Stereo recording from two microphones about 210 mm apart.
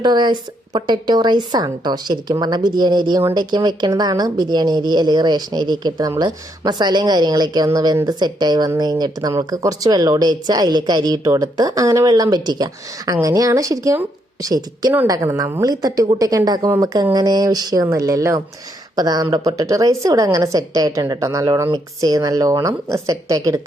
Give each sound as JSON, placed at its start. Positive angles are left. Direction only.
{"t": 0.0, "sound": "a woman's voice", "side_deg": -20}